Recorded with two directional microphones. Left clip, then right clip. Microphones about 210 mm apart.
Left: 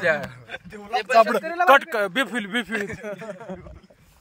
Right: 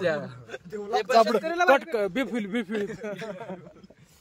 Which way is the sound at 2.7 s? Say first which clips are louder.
Left 3 dB; 20° left (ahead or behind).